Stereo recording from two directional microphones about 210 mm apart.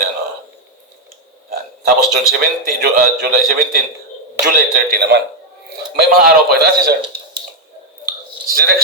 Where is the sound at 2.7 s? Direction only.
45° right (ahead or behind).